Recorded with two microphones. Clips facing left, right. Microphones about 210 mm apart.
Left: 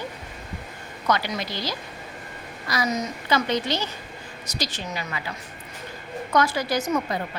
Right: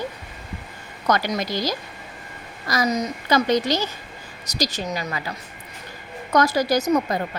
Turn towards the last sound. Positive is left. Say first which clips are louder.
# right 5 dB
turn(degrees=-40)  # may be behind; listen again after turning